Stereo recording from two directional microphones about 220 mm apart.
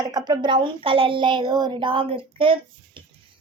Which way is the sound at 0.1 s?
20° right (ahead or behind).